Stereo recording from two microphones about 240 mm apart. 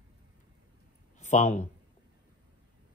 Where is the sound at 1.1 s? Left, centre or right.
Left.